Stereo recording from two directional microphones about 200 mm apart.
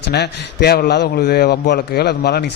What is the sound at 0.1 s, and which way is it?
A man's voice, 55° left (ahead or behind).